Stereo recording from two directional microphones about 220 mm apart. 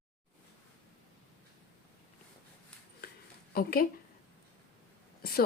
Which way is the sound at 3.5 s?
40° left (ahead or behind).